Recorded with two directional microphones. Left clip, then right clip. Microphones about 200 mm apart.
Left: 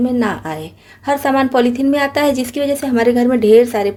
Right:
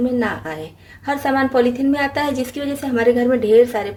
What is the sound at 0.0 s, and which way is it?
A woman's voice, 45° left (ahead or behind).